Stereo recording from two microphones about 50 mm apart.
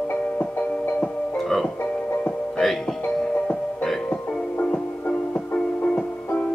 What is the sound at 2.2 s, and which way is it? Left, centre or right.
Music, left.